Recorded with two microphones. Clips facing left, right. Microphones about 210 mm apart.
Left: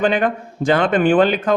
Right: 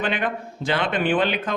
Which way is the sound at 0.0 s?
45° left (ahead or behind).